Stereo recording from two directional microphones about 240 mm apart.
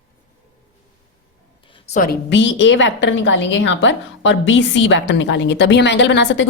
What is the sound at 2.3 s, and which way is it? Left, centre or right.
A woman's voice, left.